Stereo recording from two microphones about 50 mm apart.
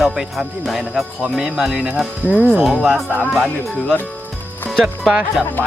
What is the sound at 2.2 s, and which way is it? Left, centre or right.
Speech, right.